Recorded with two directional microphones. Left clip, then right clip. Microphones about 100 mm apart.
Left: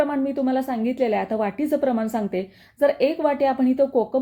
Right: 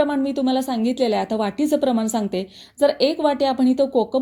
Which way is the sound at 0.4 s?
45° right (ahead or behind).